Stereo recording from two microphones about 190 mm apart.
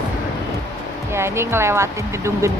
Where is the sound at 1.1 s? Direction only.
15° right (ahead or behind).